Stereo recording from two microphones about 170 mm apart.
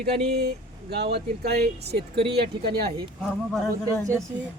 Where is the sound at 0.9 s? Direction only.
70° right (ahead or behind).